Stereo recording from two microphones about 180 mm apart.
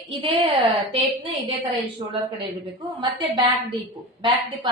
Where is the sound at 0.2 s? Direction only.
30° right (ahead or behind).